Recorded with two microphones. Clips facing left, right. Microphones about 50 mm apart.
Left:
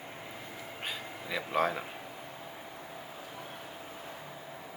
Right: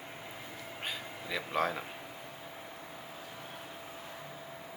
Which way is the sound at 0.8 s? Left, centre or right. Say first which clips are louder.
Left 1 dB; centre.